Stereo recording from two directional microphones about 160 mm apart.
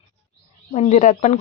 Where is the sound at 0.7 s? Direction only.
45° left (ahead or behind).